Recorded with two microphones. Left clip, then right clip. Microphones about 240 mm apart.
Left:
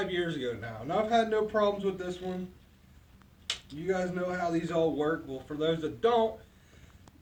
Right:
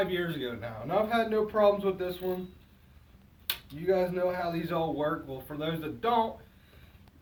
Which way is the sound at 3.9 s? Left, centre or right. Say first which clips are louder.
Right 5 dB; centre.